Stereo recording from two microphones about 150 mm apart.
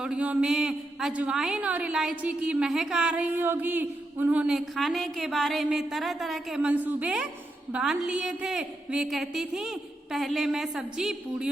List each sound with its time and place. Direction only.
0.0 s a woman's voice: 10° right (ahead or behind)